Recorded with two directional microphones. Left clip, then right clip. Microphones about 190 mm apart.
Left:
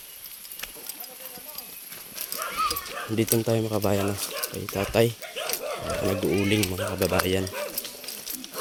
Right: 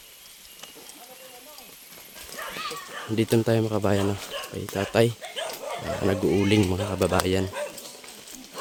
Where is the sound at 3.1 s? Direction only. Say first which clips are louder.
Right 2 dB; 25° right (ahead or behind).